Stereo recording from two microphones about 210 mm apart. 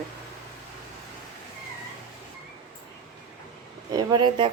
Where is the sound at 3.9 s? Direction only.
20° right (ahead or behind).